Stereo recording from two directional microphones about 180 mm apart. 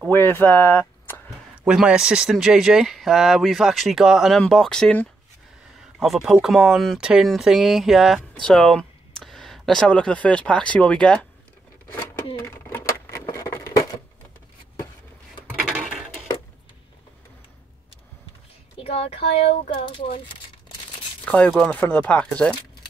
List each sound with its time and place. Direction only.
0.1 s speech: 15° left (ahead or behind)
1.6 s speech: 5° right (ahead or behind)
12.4 s a sound: 10° left (ahead or behind)
18.8 s speech: 35° left (ahead or behind)
19.8 s speech: 30° left (ahead or behind)
21.3 s speech: 5° left (ahead or behind)